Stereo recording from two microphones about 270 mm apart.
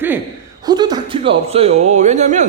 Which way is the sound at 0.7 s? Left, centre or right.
Centre.